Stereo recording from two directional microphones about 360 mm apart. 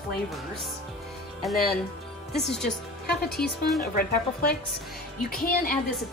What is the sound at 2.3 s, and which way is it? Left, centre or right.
Speech, centre.